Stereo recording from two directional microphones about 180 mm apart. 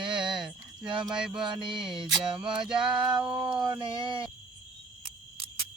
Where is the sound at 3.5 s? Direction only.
25° right (ahead or behind).